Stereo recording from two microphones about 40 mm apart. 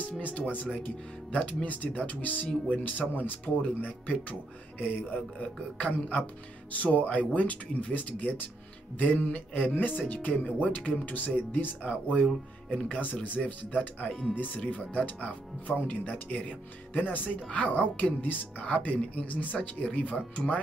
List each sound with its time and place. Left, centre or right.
0.2 s speech: left
3.0 s speech: right
3.6 s speech: left
11.8 s speech: left
12.6 s speech: left
12.9 s speech: left
17.0 s speech: left
17.5 s speech: left
18.6 s speech: left